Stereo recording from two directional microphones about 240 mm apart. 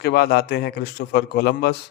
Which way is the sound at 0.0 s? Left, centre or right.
Left.